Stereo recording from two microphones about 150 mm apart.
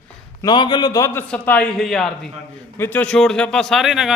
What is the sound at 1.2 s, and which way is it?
Speech, 10° left (ahead or behind).